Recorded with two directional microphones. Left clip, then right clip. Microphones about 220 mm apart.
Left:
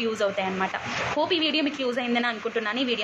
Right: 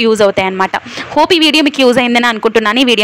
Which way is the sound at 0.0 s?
50° right (ahead or behind).